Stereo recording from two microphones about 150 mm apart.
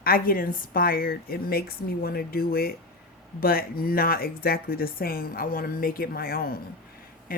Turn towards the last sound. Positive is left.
turn(degrees=80)